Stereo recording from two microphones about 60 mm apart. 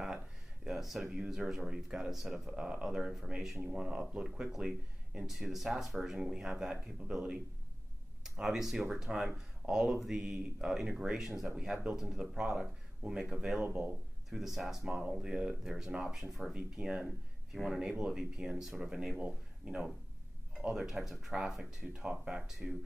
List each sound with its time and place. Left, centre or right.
0.7 s speech: centre
2.5 s speech: centre
18.8 s speech: centre